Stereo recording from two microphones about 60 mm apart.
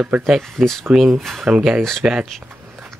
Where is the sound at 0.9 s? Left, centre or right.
Centre.